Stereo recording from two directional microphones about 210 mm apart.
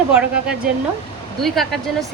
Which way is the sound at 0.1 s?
5° right (ahead or behind).